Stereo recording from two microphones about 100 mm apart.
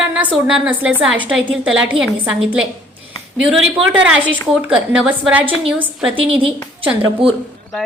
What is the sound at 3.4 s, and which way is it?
A woman's voice, 15° right (ahead or behind).